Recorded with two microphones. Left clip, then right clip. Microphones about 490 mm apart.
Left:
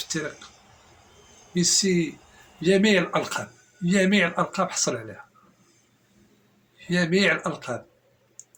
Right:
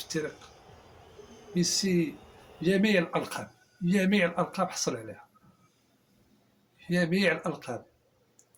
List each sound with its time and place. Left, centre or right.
1.5 s speech: right
6.8 s speech: right